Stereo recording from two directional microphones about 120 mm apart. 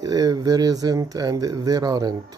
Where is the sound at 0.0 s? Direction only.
30° right (ahead or behind).